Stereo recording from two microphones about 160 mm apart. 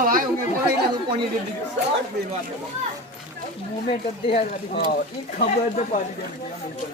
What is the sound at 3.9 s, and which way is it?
Speech, 35° left (ahead or behind).